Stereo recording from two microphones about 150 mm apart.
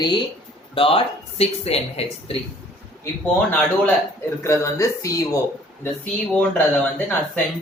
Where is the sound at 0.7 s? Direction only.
40° left (ahead or behind).